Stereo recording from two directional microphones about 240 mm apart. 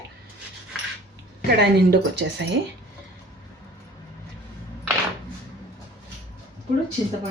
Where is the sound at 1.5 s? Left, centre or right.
Right.